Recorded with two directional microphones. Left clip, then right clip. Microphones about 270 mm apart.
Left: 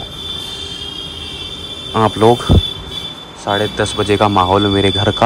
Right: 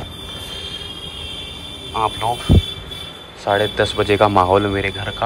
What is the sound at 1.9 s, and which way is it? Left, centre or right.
Speech, left.